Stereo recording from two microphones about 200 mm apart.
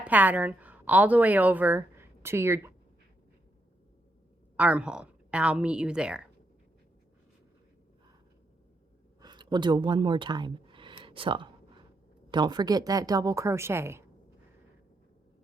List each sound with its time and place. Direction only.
0.0 s a woman's voice: 10° right (ahead or behind)
4.5 s a woman's voice: 5° right (ahead or behind)
9.2 s a woman's voice: 20° right (ahead or behind)